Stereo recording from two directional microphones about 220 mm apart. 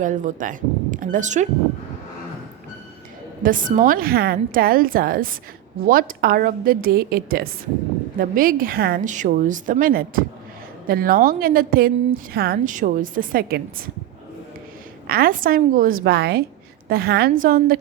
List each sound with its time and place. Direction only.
0.0 s a woman's voice: 35° right (ahead or behind)
3.4 s a woman's voice: 35° right (ahead or behind)
15.0 s a woman's voice: 45° right (ahead or behind)